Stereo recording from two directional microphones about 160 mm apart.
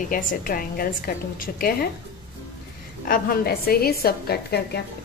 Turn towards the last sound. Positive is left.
turn(degrees=80)